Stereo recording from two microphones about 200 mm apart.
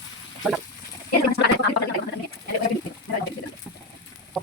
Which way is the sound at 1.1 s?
50° left (ahead or behind).